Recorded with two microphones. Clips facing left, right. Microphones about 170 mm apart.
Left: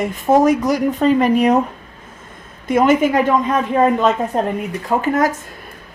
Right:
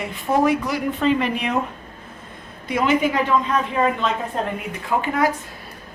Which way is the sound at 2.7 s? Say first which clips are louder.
Left 6 dB; 45° left (ahead or behind).